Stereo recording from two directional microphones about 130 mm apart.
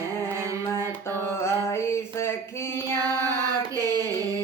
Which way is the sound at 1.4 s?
20° left (ahead or behind).